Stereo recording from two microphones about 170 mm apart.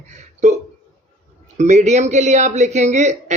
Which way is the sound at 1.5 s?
45° right (ahead or behind).